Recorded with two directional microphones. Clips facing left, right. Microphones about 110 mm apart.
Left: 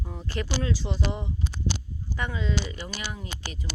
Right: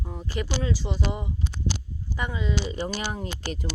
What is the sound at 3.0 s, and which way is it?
Speech, 45° right (ahead or behind).